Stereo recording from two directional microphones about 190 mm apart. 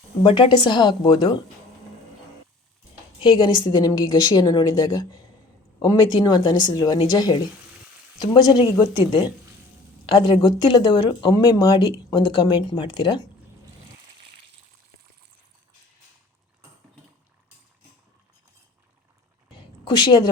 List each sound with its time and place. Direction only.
0.2 s speech: 25° left (ahead or behind)
3.2 s speech: 25° left (ahead or behind)
10.1 s speech: 30° left (ahead or behind)
19.5 s a sound: 25° left (ahead or behind)